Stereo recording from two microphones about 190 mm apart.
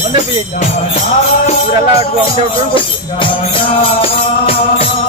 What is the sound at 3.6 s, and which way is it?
Music, 30° left (ahead or behind).